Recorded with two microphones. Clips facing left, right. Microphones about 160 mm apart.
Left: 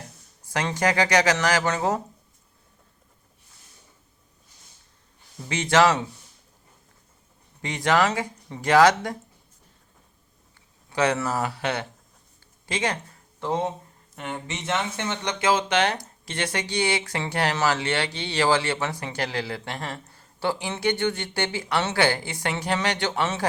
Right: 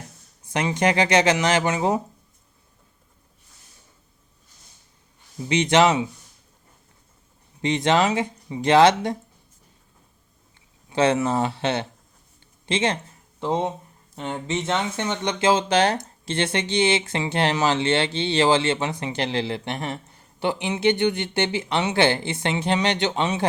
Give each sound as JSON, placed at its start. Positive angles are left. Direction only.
{"t": 0.4, "sound": "speech", "side_deg": -20}
{"t": 5.5, "sound": "speech", "side_deg": -20}
{"t": 7.6, "sound": "speech", "side_deg": -25}
{"t": 10.9, "sound": "speech", "side_deg": -25}